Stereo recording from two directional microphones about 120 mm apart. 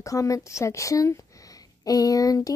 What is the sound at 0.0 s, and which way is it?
Speech, 25° left (ahead or behind).